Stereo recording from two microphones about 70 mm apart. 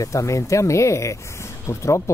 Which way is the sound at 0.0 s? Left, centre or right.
Left.